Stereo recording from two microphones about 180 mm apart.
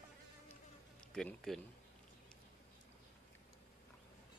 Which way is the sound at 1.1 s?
5° left (ahead or behind).